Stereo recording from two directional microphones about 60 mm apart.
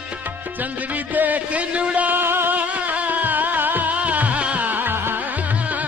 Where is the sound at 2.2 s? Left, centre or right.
Right.